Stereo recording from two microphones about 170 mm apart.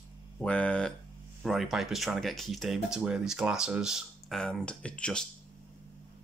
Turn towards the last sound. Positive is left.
turn(degrees=5)  # may be behind; listen again after turning